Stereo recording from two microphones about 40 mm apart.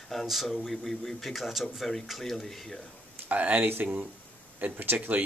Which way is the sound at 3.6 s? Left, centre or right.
Right.